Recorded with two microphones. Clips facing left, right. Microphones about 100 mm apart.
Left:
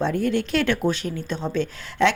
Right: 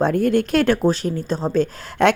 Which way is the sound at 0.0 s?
50° right (ahead or behind).